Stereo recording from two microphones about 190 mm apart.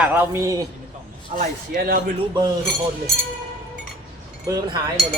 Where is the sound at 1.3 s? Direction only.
40° right (ahead or behind).